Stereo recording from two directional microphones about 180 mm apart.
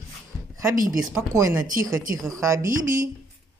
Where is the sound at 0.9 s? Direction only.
20° right (ahead or behind).